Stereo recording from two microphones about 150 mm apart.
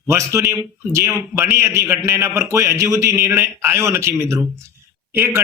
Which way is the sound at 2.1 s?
15° right (ahead or behind).